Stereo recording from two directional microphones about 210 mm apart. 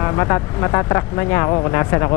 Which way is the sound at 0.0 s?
15° left (ahead or behind).